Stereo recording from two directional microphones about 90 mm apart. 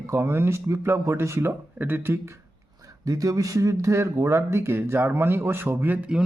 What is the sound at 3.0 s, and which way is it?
Speech, 40° right (ahead or behind).